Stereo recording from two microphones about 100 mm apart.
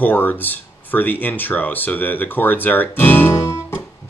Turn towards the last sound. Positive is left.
turn(degrees=30)  # may be behind; listen again after turning